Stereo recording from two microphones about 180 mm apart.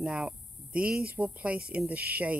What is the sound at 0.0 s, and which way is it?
Speech, 5° right (ahead or behind).